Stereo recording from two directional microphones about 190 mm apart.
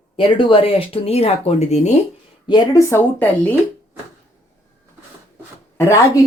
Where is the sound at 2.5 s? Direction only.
20° left (ahead or behind).